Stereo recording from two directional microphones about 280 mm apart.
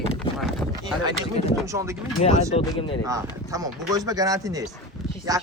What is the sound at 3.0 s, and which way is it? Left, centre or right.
Speech, centre.